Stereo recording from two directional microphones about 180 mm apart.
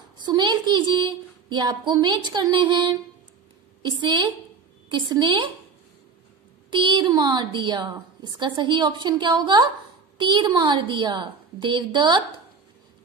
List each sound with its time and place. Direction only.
0.2 s a woman's voice: 25° right (ahead or behind)
6.7 s a woman's voice: 25° right (ahead or behind)